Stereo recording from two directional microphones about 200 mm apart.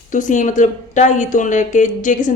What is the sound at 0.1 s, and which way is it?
A woman's voice, 40° left (ahead or behind).